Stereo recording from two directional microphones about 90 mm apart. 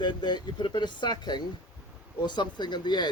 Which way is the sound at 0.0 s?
55° left (ahead or behind).